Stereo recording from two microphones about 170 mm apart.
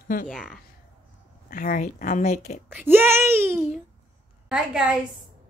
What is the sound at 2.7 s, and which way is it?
A child's voice, 10° right (ahead or behind).